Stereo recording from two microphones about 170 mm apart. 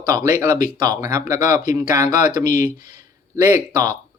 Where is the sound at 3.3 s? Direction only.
20° right (ahead or behind).